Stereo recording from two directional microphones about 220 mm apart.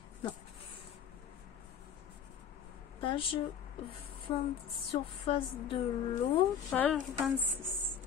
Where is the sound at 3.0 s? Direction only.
25° left (ahead or behind).